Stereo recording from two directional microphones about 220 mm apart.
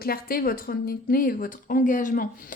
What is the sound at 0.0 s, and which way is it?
A woman's voice, 40° left (ahead or behind).